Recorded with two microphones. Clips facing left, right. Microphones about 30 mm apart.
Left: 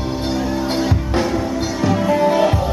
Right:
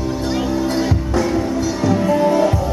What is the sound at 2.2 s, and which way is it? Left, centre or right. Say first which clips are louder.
Music: left 1 dB; left.